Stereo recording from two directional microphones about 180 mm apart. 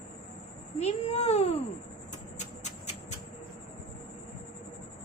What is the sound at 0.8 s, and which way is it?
Speech, 35° left (ahead or behind).